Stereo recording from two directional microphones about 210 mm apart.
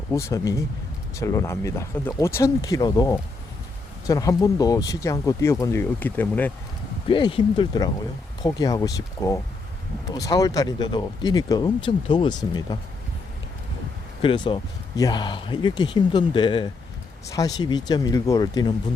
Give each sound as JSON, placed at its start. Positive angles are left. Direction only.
{"t": 0.1, "sound": "speech", "side_deg": 15}
{"t": 7.1, "sound": "speech", "side_deg": 25}
{"t": 14.2, "sound": "speech", "side_deg": 25}